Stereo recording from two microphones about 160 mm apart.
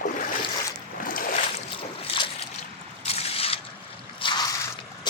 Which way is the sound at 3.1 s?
40° left (ahead or behind).